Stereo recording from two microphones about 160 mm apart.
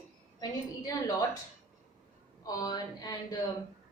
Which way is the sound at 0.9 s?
20° left (ahead or behind).